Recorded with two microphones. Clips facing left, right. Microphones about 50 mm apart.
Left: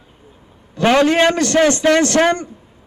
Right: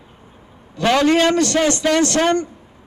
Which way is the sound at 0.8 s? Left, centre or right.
Left.